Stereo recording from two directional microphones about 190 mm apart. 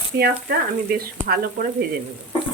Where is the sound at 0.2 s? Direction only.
55° right (ahead or behind).